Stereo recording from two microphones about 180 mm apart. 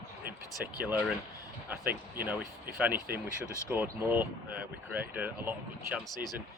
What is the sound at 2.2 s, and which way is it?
Speech, 10° right (ahead or behind).